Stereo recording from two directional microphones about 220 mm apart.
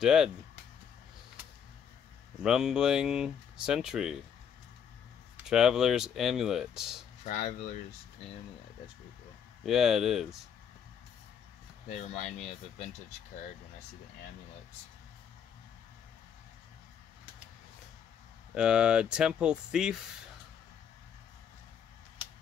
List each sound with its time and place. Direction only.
0.0 s speech: centre (ahead or behind)
2.4 s speech: 5° right (ahead or behind)
5.5 s speech: centre (ahead or behind)
7.2 s speech: 30° left (ahead or behind)
9.7 s speech: centre (ahead or behind)
11.9 s speech: 30° left (ahead or behind)
18.5 s speech: 5° right (ahead or behind)